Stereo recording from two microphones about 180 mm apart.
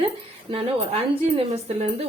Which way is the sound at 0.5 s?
30° right (ahead or behind).